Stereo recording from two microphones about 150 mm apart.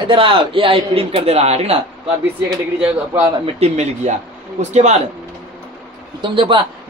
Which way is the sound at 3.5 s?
45° right (ahead or behind).